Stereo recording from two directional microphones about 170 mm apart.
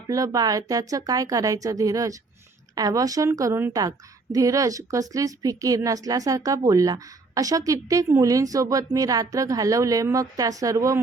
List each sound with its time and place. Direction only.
0.1 s a woman's voice: 20° right (ahead or behind)